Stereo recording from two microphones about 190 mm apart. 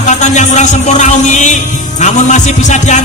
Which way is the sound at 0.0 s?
40° left (ahead or behind).